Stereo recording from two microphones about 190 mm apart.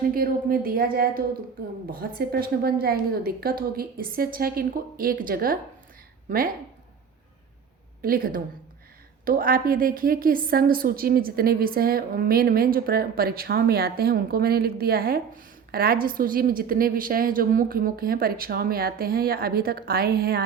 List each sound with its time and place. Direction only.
0.1 s a woman's voice: 50° right (ahead or behind)
8.0 s a woman's voice: 50° right (ahead or behind)